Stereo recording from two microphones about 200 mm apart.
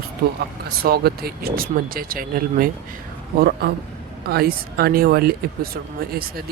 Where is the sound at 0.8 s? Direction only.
50° right (ahead or behind).